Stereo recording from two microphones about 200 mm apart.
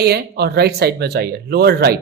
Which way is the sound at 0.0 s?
55° right (ahead or behind).